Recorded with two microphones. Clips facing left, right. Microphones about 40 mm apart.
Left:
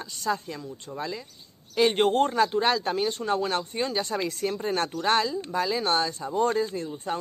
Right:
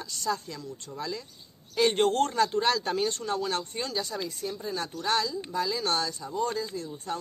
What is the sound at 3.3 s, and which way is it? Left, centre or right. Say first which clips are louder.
Speech: left 4 dB; left.